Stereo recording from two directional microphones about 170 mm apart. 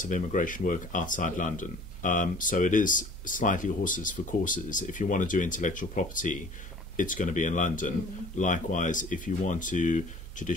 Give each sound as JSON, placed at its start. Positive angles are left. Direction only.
{"t": 0.0, "sound": "speech", "side_deg": 50}